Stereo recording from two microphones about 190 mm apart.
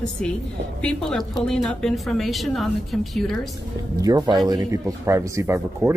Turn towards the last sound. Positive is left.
turn(degrees=-15)  # may be behind; listen again after turning